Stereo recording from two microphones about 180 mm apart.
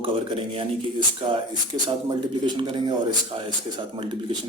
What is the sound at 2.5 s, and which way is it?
Speech, 25° right (ahead or behind).